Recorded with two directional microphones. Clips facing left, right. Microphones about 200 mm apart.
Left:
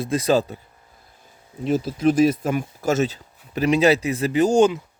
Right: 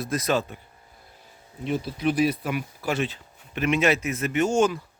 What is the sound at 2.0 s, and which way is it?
Speech, 45° left (ahead or behind).